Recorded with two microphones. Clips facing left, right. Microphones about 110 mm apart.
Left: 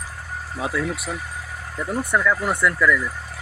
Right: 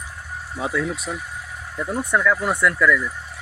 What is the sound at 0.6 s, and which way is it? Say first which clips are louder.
Speech: right 1 dB; 5° left (ahead or behind).